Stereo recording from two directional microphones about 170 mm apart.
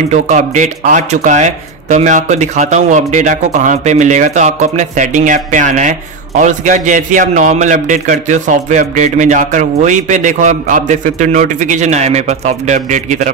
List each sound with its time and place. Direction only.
0.1 s speech: 45° right (ahead or behind)